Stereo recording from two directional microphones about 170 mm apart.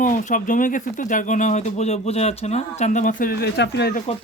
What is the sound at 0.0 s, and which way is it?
Speech, 50° left (ahead or behind).